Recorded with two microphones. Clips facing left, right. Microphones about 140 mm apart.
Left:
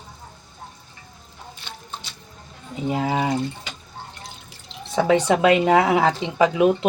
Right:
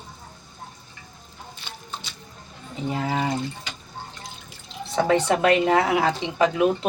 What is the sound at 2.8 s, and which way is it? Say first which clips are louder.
Speech: left 3 dB; 15° left (ahead or behind).